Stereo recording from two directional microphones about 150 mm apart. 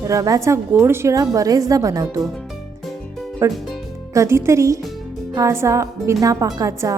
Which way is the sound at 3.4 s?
20° right (ahead or behind).